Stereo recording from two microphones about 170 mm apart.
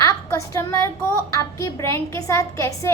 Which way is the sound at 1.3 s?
20° left (ahead or behind).